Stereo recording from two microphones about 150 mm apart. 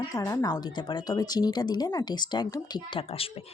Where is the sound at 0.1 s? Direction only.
20° left (ahead or behind).